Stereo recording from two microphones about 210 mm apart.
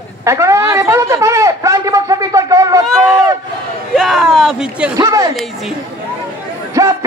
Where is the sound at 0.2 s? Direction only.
15° right (ahead or behind).